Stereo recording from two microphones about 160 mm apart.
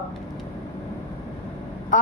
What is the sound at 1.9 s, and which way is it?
Speech, 55° left (ahead or behind).